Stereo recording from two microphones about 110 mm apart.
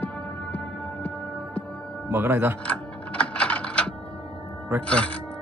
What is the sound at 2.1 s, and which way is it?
Speech, 20° right (ahead or behind).